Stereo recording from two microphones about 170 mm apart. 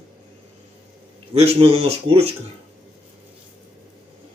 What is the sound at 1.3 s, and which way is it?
Speech, 35° right (ahead or behind).